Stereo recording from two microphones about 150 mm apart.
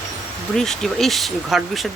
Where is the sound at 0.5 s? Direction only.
5° left (ahead or behind).